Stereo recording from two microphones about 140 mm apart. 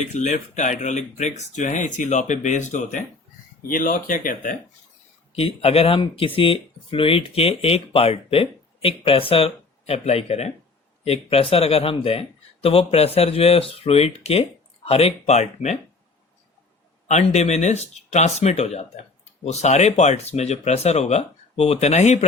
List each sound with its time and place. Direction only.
0.0 s speech: 55° left (ahead or behind)
3.7 s speech: 75° left (ahead or behind)
5.3 s speech: 45° left (ahead or behind)
17.1 s speech: 55° left (ahead or behind)